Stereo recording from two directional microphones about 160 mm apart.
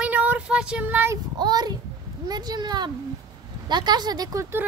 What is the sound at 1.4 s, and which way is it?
A child's voice, 25° right (ahead or behind).